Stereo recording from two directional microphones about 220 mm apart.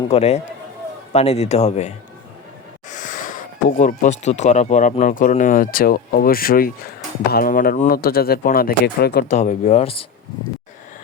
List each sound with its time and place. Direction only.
0.1 s speech: 30° left (ahead or behind)
2.9 s a sound: 35° left (ahead or behind)
4.2 s speech: 30° left (ahead or behind); by 9.3 s 50° left (ahead or behind)
9.3 s speech: 30° left (ahead or behind)